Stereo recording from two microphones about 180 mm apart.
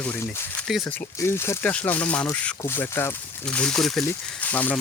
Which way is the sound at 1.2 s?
15° left (ahead or behind).